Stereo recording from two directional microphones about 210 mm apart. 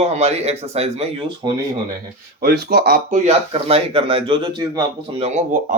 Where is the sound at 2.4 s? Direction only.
45° right (ahead or behind).